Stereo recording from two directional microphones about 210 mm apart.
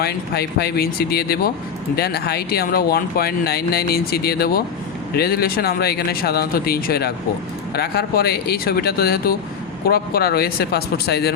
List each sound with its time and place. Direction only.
0.0 s speech: 50° left (ahead or behind)